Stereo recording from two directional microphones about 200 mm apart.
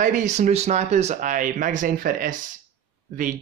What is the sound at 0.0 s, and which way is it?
Speech, 40° right (ahead or behind).